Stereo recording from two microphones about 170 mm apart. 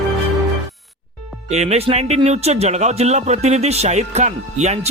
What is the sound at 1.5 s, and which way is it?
Speech, 40° right (ahead or behind).